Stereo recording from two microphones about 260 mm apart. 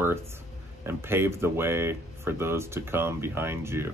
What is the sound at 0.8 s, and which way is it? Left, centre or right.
Speech, centre.